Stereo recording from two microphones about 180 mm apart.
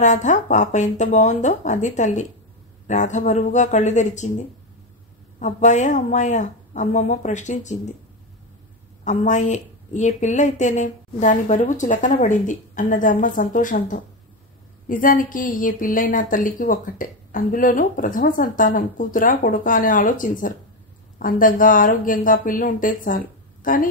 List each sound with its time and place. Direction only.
0.0 s a woman's voice: 40° left (ahead or behind)
5.4 s a woman's voice: 40° left (ahead or behind)
9.0 s speech: 40° left (ahead or behind)